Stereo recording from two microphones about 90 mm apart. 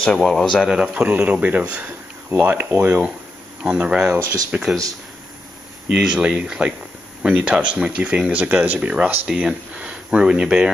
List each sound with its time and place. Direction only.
0.0 s speech: 5° left (ahead or behind)
1.1 s speech: 15° right (ahead or behind)
3.6 s speech: 10° right (ahead or behind)
5.9 s speech: 10° right (ahead or behind)
9.3 s speech: 5° right (ahead or behind)